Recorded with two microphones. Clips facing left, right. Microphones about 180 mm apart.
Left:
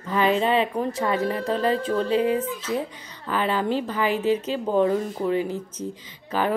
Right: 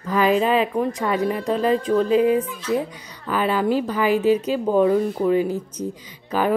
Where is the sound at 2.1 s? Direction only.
30° left (ahead or behind).